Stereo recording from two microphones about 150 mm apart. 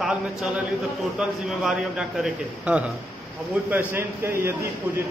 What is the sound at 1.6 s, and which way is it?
A man's voice, 5° right (ahead or behind).